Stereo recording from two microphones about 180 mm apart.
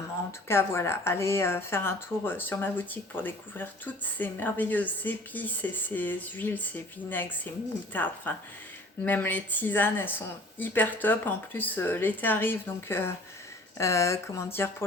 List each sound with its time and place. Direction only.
0.4 s speech: 15° left (ahead or behind)